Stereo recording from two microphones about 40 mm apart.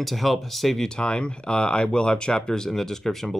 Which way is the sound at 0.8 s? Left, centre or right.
Left.